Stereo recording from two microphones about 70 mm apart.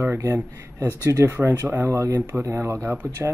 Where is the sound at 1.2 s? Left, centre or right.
Right.